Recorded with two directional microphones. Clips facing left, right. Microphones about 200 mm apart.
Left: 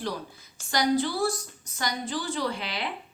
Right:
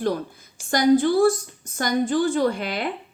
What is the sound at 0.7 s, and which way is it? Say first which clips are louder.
A woman's voice: right 8 dB; 50° right (ahead or behind).